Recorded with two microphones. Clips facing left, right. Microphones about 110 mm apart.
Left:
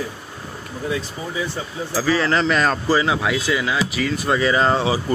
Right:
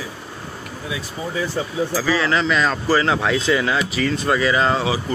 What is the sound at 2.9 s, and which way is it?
Speech, 15° left (ahead or behind).